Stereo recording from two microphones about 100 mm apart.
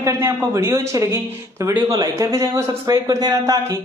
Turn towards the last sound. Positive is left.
turn(degrees=-40)  # may be behind; listen again after turning